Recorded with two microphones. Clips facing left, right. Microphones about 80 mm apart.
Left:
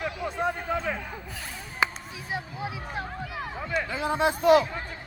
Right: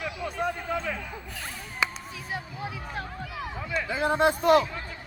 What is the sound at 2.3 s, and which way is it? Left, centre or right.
Speech, left.